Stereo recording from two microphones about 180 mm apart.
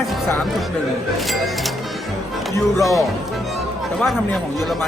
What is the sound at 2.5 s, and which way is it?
Speech, 20° left (ahead or behind).